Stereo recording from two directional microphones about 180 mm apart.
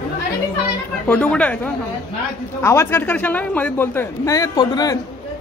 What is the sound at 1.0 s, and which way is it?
A man's voice, 5° left (ahead or behind).